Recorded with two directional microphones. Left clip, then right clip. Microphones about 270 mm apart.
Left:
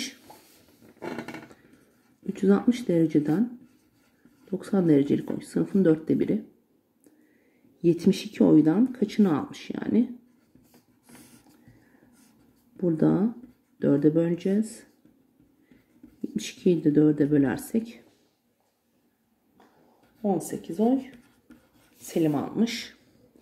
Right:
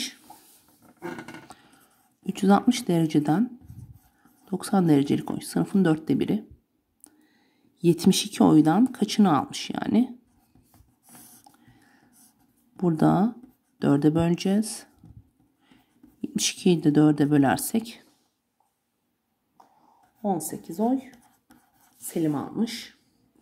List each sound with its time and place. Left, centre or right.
2.2 s speech: right
4.6 s speech: right
7.8 s speech: right
12.7 s speech: right
16.2 s speech: right
20.6 s speech: right
22.0 s speech: right